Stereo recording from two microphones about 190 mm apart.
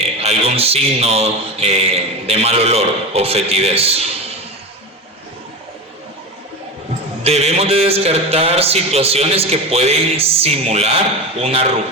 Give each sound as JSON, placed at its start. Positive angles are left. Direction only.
{"t": 0.2, "sound": "a man's voice", "side_deg": -35}
{"t": 7.3, "sound": "a man's voice", "side_deg": -35}